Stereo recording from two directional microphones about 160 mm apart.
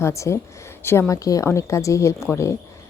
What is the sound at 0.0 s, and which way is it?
A woman's voice, 20° left (ahead or behind).